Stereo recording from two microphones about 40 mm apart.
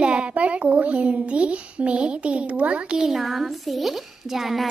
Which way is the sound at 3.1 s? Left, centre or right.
Centre.